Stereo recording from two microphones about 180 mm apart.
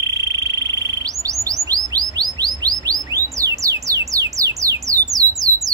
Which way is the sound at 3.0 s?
20° right (ahead or behind).